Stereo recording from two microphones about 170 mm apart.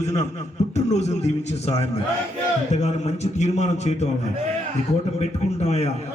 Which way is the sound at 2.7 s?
40° left (ahead or behind).